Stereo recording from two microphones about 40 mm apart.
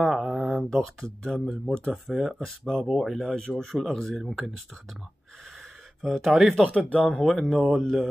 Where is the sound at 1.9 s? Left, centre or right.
Centre.